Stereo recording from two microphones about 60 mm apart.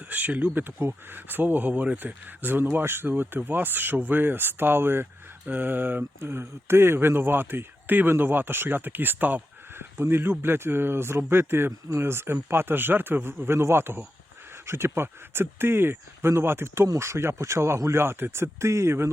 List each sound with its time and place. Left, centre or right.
0.1 s speech: right